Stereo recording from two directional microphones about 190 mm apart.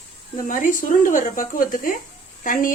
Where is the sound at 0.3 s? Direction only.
45° left (ahead or behind).